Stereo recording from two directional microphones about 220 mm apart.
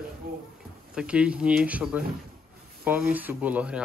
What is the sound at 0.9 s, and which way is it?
Speech, 5° right (ahead or behind).